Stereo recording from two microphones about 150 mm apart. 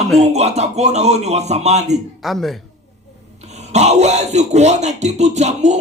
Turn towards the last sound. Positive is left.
turn(degrees=-50)  # may be behind; listen again after turning